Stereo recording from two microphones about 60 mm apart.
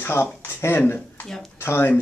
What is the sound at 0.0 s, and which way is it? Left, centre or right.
Speech, left.